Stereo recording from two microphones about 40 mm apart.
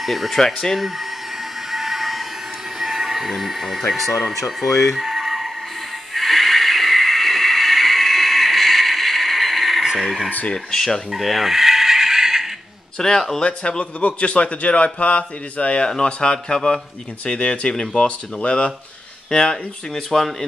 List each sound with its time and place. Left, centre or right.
0.0 s speech: centre
0.4 s fowl: centre
1.7 s a sound: centre
2.8 s speech: centre
6.1 s a sound: centre
10.5 s fowl: centre
11.1 s a sound: centre
13.0 s fowl: centre
13.4 s a man's voice: left
19.3 s speech: centre
20.1 s fowl: centre